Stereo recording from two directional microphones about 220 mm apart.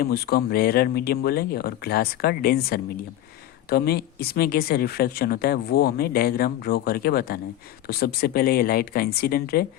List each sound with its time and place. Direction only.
0.0 s speech: 45° left (ahead or behind)